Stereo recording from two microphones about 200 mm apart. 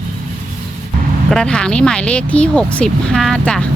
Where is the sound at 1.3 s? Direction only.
5° left (ahead or behind).